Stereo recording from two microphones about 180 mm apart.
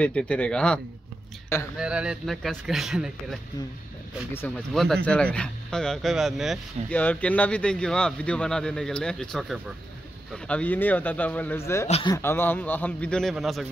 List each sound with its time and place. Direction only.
0.0 s speech: 5° left (ahead or behind)
1.8 s speech: 5° right (ahead or behind)
4.3 s a man's voice: 10° left (ahead or behind)
11.9 s speech: 25° left (ahead or behind)
12.2 s a man's voice: 10° left (ahead or behind)